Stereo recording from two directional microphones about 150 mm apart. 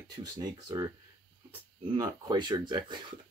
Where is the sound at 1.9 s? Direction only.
25° right (ahead or behind).